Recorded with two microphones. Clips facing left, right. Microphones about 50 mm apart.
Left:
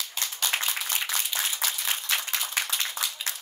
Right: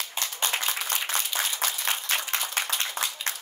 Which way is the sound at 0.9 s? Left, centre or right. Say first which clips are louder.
Right 1 dB; right.